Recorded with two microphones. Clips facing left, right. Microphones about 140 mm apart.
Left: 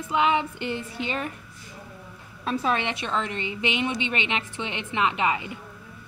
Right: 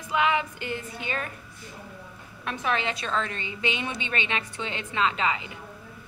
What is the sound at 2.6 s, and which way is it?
A woman's voice, 25° left (ahead or behind).